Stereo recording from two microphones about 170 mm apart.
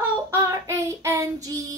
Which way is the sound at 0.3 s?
15° right (ahead or behind).